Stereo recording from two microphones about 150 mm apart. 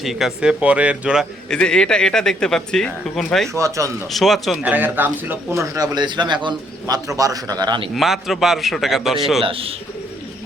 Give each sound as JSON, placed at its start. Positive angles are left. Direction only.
{"t": 0.0, "sound": "speech", "side_deg": 0}
{"t": 3.5, "sound": "a man's voice", "side_deg": -20}
{"t": 4.1, "sound": "speech", "side_deg": 0}
{"t": 4.6, "sound": "a man's voice", "side_deg": -10}
{"t": 7.9, "sound": "speech", "side_deg": 0}
{"t": 9.4, "sound": "speech", "side_deg": -40}